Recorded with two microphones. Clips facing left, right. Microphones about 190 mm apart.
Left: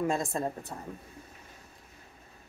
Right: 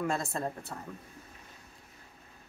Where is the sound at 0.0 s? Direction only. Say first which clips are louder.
Left 3 dB; 20° left (ahead or behind).